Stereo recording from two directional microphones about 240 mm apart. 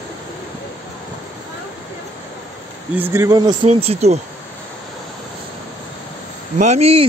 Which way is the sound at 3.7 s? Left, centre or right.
Right.